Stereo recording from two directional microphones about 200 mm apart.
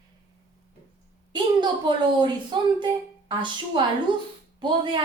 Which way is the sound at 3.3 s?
25° right (ahead or behind).